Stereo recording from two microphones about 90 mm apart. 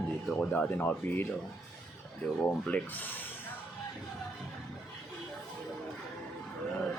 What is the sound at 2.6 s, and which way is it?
Speech, 15° left (ahead or behind).